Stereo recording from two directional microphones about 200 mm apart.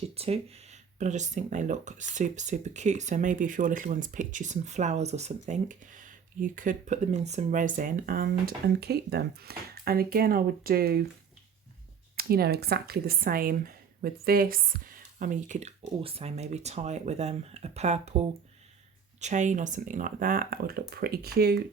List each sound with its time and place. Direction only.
0.1 s speech: 30° right (ahead or behind); by 11.0 s 50° right (ahead or behind)
12.1 s speech: 50° right (ahead or behind)